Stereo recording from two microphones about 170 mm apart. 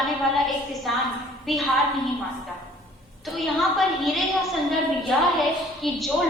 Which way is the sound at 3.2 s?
Centre (ahead or behind).